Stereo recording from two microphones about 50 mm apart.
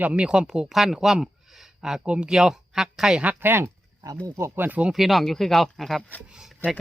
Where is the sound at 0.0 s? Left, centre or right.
Right.